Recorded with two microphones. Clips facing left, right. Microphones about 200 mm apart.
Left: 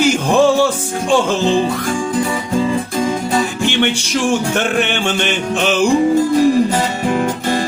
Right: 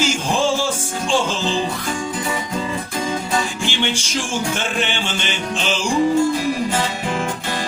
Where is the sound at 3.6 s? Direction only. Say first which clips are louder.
Left 6 dB; 60° left (ahead or behind).